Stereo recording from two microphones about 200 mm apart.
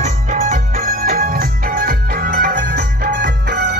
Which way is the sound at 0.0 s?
35° right (ahead or behind).